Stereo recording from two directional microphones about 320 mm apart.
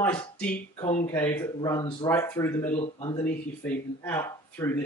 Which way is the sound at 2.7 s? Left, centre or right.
Centre.